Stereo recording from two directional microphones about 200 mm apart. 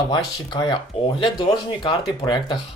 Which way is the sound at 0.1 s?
20° left (ahead or behind).